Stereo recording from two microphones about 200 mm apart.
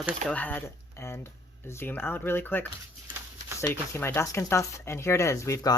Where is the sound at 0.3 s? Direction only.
10° left (ahead or behind).